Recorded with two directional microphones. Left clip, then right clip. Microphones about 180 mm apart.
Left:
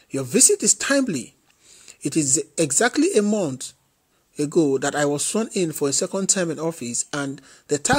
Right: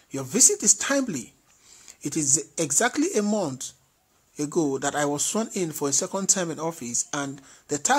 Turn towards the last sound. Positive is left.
turn(degrees=25)  # may be behind; listen again after turning